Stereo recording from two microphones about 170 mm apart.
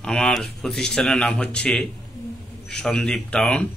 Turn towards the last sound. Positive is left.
turn(degrees=5)  # may be behind; listen again after turning